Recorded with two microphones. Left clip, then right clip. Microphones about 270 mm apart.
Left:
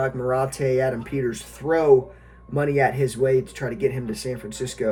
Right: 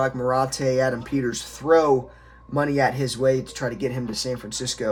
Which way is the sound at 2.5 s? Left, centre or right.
Centre.